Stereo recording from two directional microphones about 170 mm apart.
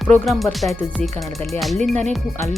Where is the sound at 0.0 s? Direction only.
Centre (ahead or behind).